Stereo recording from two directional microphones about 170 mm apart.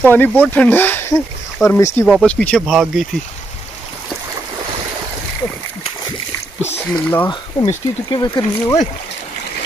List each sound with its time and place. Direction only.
0.0 s speech: 10° left (ahead or behind)
2.0 s speech: centre (ahead or behind)
6.9 s speech: 10° left (ahead or behind)
7.2 s speech: 25° left (ahead or behind)